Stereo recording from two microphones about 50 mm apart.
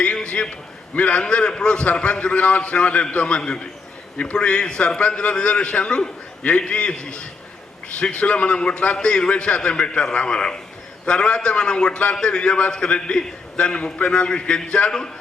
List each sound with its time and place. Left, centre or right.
0.0 s a man's voice: left